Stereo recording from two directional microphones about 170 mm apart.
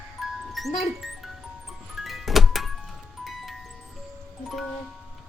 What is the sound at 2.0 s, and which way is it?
Music, centre (ahead or behind).